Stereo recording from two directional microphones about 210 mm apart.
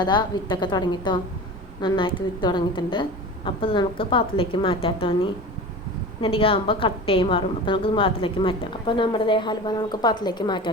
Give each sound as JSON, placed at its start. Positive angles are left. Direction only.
{"t": 0.0, "sound": "a woman's voice", "side_deg": 20}